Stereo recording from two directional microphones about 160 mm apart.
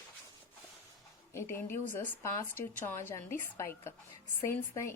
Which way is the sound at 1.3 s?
15° left (ahead or behind).